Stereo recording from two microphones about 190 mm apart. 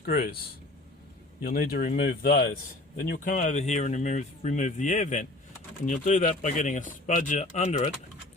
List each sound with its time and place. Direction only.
0.0 s speech: 50° left (ahead or behind)